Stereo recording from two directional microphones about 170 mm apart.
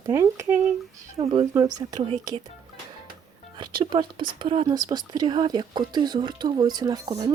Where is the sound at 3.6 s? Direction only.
25° right (ahead or behind).